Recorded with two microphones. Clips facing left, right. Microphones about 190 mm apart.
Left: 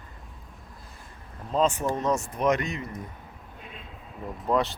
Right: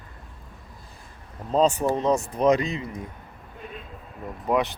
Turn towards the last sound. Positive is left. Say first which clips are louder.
# right 1 dB
turn(degrees=-15)  # may be behind; listen again after turning